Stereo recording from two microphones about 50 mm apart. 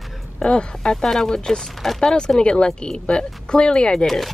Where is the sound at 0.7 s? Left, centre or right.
Centre.